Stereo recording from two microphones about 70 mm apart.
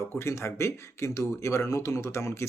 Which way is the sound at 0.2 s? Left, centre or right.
Left.